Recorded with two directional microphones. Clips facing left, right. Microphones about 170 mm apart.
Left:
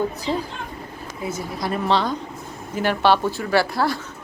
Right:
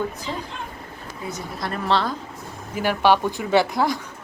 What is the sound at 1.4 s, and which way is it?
Speech, centre (ahead or behind).